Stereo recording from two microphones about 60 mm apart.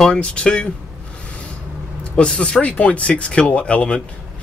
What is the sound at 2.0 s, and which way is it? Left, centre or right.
Speech, centre.